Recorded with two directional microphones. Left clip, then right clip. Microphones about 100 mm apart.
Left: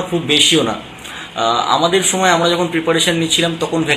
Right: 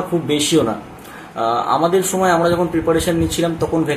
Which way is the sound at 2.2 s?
15° right (ahead or behind).